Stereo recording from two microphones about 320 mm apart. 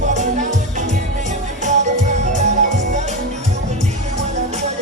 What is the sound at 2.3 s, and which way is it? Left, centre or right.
Music, right.